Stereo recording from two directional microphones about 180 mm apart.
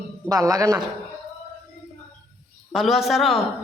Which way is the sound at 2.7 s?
Centre (ahead or behind).